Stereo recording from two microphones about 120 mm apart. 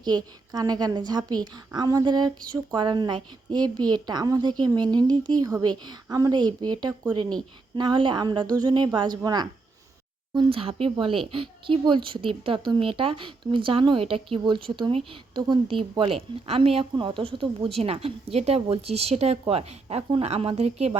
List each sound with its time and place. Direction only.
0.0 s a woman's voice: 35° right (ahead or behind)
10.3 s a woman's voice: 50° right (ahead or behind)
17.7 s speech: 55° right (ahead or behind)